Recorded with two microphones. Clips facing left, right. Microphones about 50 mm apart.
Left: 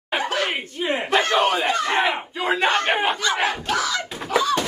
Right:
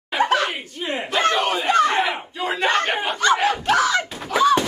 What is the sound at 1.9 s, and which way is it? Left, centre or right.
Battle cry, left.